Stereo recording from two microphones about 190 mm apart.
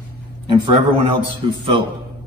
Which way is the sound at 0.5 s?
25° right (ahead or behind).